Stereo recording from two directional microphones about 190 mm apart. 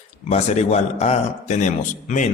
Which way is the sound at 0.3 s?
35° left (ahead or behind).